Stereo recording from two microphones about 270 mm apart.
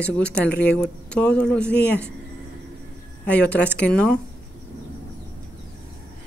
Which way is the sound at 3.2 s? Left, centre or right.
Centre.